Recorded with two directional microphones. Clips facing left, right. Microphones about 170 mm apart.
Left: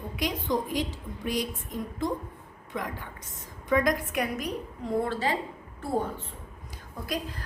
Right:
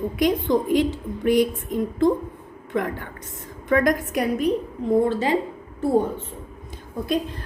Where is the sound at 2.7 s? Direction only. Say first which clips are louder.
Right 9 dB; 60° right (ahead or behind).